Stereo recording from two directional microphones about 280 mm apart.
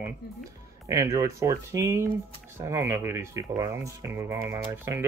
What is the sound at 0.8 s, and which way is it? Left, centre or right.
Speech, centre.